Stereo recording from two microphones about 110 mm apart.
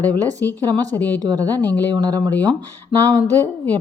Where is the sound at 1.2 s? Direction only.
35° right (ahead or behind).